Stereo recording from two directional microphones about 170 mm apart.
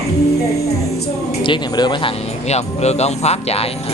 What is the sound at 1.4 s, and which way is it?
Speech, 25° left (ahead or behind).